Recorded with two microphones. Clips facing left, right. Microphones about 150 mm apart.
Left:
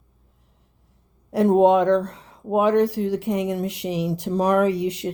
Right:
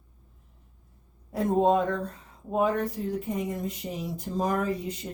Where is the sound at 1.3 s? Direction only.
75° left (ahead or behind).